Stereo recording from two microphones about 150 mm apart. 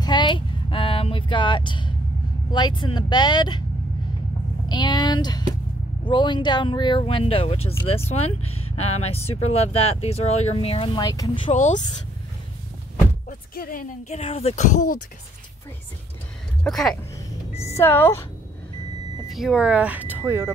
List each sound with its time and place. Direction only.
0.0 s a sound: 30° left (ahead or behind)
2.5 s speech: 30° left (ahead or behind)
4.6 s speech: 30° left (ahead or behind)
11.0 s speech: 25° left (ahead or behind)
11.5 s speech: 55° left (ahead or behind)
13.6 s speech: 70° left (ahead or behind)
16.6 s speech: 5° left (ahead or behind)
17.7 s speech: 15° left (ahead or behind)
19.2 s speech: centre (ahead or behind); by 20.5 s 15° right (ahead or behind)